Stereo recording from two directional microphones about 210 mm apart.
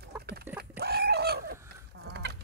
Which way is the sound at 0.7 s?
50° right (ahead or behind).